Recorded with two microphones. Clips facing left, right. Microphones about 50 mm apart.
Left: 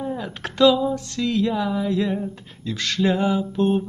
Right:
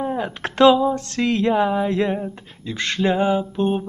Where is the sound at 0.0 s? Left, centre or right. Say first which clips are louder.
Right 4 dB; right.